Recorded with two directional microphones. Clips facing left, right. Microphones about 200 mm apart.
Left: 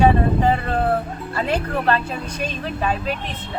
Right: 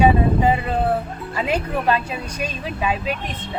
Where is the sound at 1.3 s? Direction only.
10° right (ahead or behind).